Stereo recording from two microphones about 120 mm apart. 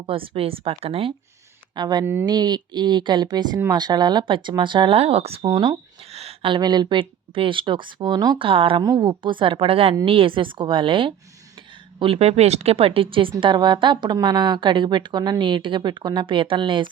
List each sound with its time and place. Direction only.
0.0 s speech: 50° right (ahead or behind)
1.7 s a woman's voice: 35° right (ahead or behind); by 5.4 s 55° right (ahead or behind)
5.4 s a woman's voice: 40° right (ahead or behind)
6.1 s a sound: 60° right (ahead or behind)
6.6 s a woman's voice: 35° right (ahead or behind)